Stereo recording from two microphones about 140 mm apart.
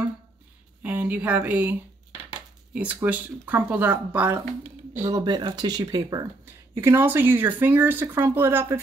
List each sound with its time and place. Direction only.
0.8 s speech: 10° right (ahead or behind)
4.9 s speech: 35° right (ahead or behind); by 8.8 s 15° right (ahead or behind)